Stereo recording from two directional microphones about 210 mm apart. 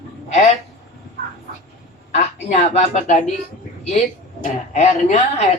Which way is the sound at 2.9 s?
35° left (ahead or behind).